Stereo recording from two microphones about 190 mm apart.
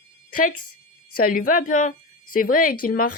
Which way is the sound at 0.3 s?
45° left (ahead or behind).